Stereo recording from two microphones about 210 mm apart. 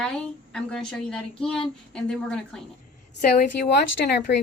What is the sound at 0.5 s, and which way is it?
Speech, 5° left (ahead or behind).